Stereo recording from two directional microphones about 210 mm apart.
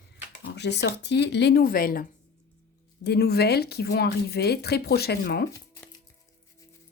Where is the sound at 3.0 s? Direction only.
50° left (ahead or behind).